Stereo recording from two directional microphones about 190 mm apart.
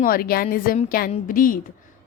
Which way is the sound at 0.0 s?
50° left (ahead or behind).